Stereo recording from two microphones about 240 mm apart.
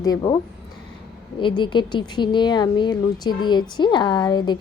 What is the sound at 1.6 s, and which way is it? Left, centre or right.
A woman's voice, centre.